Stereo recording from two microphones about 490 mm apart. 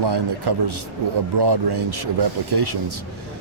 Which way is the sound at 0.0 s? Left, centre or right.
Right.